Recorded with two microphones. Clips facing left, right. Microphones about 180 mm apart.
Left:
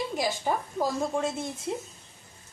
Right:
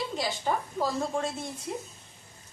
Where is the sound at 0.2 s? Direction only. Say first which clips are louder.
Left 2 dB; 15° left (ahead or behind).